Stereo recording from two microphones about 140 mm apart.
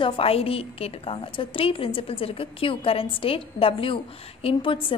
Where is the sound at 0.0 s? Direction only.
40° left (ahead or behind).